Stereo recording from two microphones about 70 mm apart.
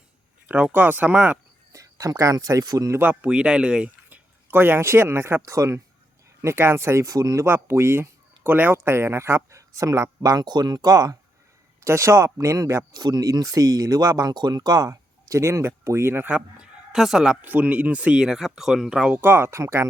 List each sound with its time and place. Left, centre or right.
0.4 s speech: right
1.7 s speech: right
2.9 s speech: right
3.2 s speech: centre
4.5 s speech: right
5.4 s speech: right
6.4 s speech: right
7.4 s speech: right
10.2 s speech: right
11.8 s speech: right
12.9 s speech: right
16.3 s speech: centre
17.4 s speech: right; by 19.1 s centre
19.1 s speech: right